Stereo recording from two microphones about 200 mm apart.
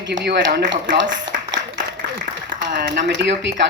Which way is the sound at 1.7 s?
60° right (ahead or behind).